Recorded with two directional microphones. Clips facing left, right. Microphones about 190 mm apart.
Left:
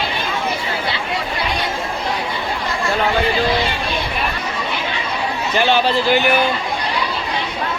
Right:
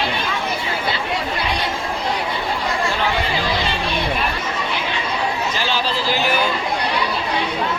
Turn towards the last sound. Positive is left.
turn(degrees=60)  # may be behind; listen again after turning